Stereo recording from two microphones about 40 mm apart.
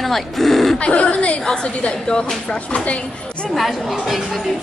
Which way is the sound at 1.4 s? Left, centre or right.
Left.